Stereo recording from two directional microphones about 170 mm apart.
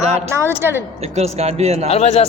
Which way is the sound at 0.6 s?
15° right (ahead or behind).